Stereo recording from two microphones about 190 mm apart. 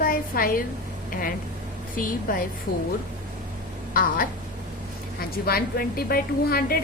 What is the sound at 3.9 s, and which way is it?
A woman's voice, 50° left (ahead or behind).